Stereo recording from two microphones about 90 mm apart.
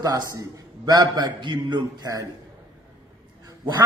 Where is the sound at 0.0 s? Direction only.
40° right (ahead or behind).